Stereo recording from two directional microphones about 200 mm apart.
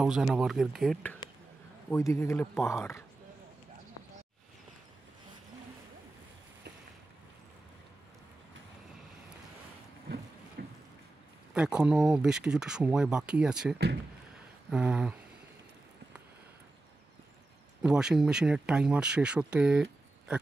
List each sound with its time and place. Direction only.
0.0 s speech: 5° right (ahead or behind)
1.9 s speech: 15° left (ahead or behind)
10.6 s a sound: 55° right (ahead or behind)
11.5 s speech: 5° right (ahead or behind)
17.8 s speech: 5° right (ahead or behind)